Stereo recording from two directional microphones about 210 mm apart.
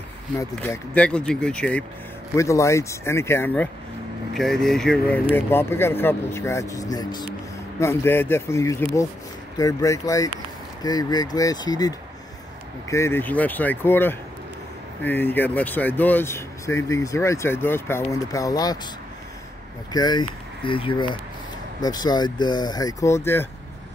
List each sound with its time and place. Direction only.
0.4 s speech: 10° left (ahead or behind)
12.9 s speech: 10° left (ahead or behind)
19.9 s speech: 20° left (ahead or behind)